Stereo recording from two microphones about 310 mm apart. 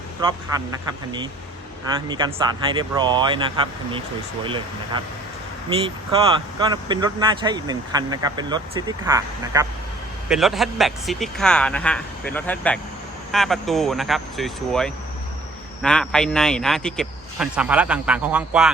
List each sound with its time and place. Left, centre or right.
0.2 s speech: centre
2.0 s speech: centre
4.4 s speech: centre